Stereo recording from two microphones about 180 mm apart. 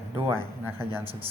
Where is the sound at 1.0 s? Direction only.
30° right (ahead or behind).